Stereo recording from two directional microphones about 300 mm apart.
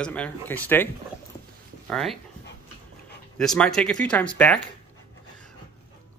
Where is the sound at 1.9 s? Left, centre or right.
Centre.